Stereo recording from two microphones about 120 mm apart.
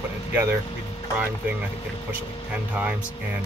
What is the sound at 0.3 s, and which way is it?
Speech, 20° right (ahead or behind).